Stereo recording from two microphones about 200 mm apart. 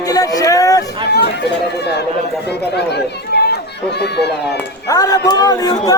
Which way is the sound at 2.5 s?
55° left (ahead or behind).